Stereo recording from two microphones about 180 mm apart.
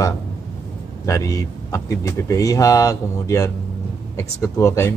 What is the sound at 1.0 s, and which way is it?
Speech, 20° left (ahead or behind).